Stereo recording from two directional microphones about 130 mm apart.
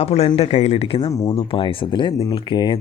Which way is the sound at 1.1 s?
25° left (ahead or behind).